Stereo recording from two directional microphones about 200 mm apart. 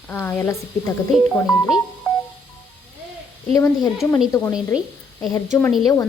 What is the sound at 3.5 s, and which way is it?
Speech, 15° left (ahead or behind).